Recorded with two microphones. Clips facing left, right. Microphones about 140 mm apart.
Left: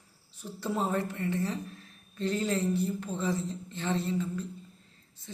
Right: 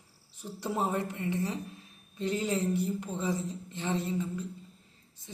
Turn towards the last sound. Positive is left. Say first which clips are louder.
# left 1 dB
turn(degrees=-15)  # may be behind; listen again after turning